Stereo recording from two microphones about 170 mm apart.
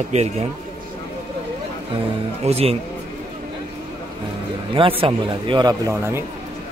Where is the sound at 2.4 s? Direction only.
35° right (ahead or behind).